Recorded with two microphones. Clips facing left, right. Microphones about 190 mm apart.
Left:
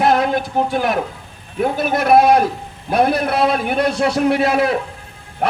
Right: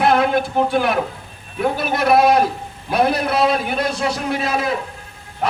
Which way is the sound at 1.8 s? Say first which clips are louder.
Left 3 dB; 50° left (ahead or behind).